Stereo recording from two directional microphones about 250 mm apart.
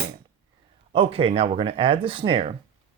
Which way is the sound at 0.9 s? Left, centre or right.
Right.